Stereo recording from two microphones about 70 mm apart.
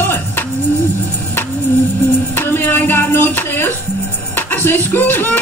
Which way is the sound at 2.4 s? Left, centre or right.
Left.